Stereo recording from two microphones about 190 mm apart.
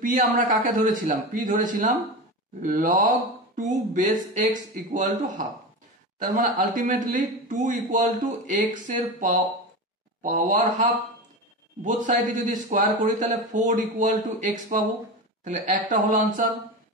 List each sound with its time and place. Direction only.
0.0 s a man's voice: 45° right (ahead or behind)